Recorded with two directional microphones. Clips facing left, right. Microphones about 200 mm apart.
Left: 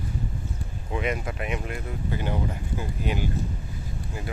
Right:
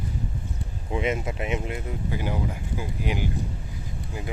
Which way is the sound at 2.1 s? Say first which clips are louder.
Left 1 dB; 10° right (ahead or behind).